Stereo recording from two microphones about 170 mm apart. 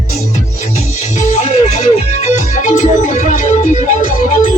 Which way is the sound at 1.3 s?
45° left (ahead or behind).